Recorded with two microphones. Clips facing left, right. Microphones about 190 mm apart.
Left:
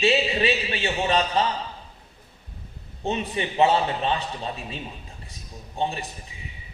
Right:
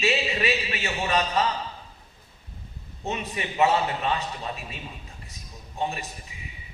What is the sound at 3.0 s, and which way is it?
A man's voice, 30° left (ahead or behind).